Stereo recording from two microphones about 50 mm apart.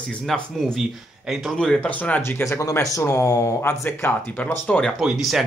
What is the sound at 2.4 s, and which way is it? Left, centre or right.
Speech, left.